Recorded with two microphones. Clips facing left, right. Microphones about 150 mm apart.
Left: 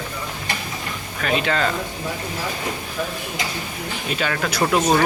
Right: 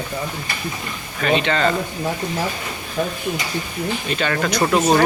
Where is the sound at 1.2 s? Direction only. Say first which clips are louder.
Right 3 dB; centre (ahead or behind).